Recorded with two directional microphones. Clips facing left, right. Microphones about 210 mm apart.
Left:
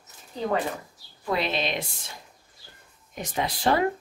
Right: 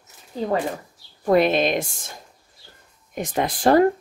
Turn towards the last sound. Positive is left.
turn(degrees=-45)  # may be behind; listen again after turning